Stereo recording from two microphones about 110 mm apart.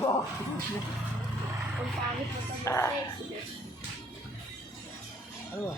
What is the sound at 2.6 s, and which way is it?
Speech, 25° left (ahead or behind).